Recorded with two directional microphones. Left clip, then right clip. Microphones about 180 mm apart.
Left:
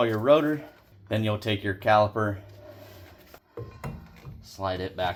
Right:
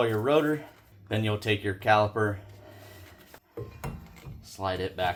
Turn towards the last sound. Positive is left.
turn(degrees=20)  # may be behind; listen again after turning